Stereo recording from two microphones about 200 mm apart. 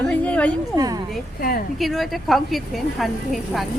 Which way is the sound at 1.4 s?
45° left (ahead or behind).